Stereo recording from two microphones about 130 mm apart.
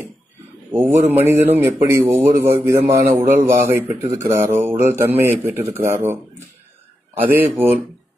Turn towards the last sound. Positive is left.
turn(degrees=-15)  # may be behind; listen again after turning